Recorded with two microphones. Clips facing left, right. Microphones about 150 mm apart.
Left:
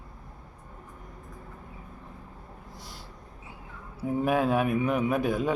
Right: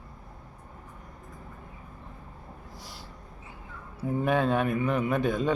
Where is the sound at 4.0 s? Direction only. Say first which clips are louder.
Even; 10° left (ahead or behind).